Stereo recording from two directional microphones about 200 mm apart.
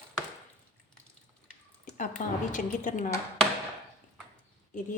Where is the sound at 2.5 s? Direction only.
40° left (ahead or behind).